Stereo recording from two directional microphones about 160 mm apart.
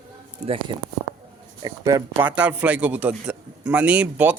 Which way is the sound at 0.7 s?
30° right (ahead or behind).